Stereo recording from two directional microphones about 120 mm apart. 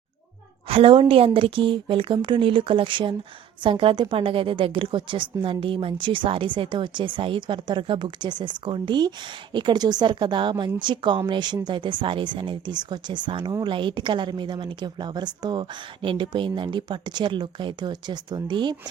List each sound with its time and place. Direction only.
0.7 s a woman's voice: 50° right (ahead or behind)